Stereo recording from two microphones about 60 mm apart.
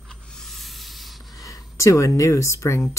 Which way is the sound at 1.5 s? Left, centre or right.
Left.